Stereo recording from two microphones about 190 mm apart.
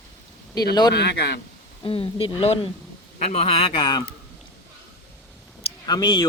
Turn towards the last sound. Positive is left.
turn(degrees=25)  # may be behind; listen again after turning